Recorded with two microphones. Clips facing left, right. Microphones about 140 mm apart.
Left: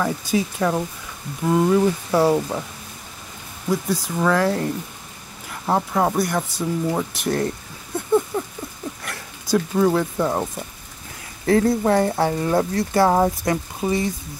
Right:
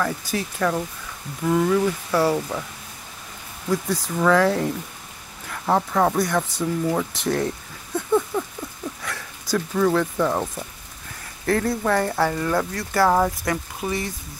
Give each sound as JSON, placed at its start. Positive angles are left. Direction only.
{"t": 0.0, "sound": "speech", "side_deg": 15}
{"t": 3.7, "sound": "speech", "side_deg": 10}
{"t": 9.1, "sound": "speech", "side_deg": 15}